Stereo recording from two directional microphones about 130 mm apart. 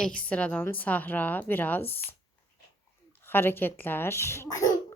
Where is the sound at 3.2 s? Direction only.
15° left (ahead or behind).